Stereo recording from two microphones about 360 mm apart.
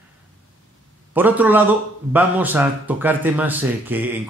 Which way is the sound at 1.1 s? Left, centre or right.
Centre.